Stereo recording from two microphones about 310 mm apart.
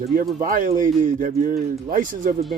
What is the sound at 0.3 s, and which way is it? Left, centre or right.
Speech, right.